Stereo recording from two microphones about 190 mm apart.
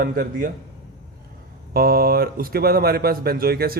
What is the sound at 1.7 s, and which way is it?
Speech, 55° right (ahead or behind).